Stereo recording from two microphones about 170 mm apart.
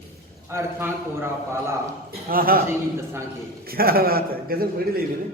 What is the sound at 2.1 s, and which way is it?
Speech, 60° right (ahead or behind).